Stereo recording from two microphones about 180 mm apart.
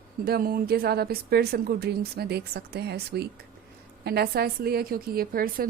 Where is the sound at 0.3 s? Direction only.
55° right (ahead or behind).